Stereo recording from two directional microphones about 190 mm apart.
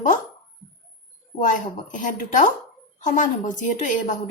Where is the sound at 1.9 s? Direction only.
40° left (ahead or behind).